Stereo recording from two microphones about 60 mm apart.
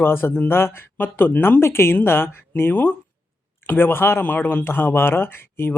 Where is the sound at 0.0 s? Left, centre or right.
Left.